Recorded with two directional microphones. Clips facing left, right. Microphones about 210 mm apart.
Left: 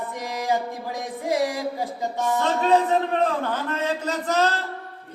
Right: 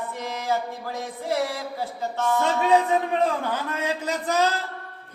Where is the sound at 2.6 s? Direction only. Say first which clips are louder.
Left 2 dB; 10° right (ahead or behind).